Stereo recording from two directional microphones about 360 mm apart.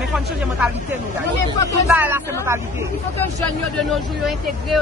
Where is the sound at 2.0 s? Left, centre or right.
Centre.